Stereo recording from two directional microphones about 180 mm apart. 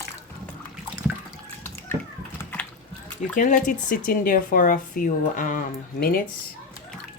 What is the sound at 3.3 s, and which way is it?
Speech, 45° left (ahead or behind).